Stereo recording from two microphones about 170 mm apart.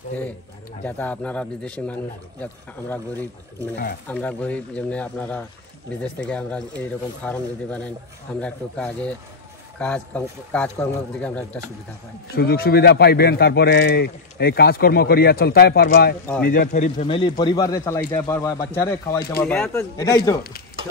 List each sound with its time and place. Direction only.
0.8 s speech: 10° left (ahead or behind)
12.4 s speech: 65° left (ahead or behind)
16.4 s a man's voice: 50° left (ahead or behind)
17.1 s speech: 30° left (ahead or behind)